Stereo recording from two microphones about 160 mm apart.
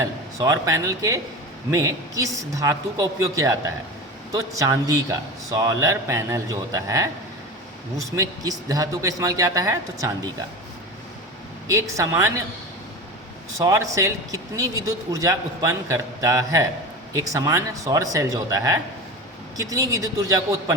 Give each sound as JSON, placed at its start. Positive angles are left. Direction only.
{"t": 0.0, "sound": "a man's voice", "side_deg": -20}
{"t": 11.7, "sound": "speech", "side_deg": -20}
{"t": 13.5, "sound": "a man's voice", "side_deg": -20}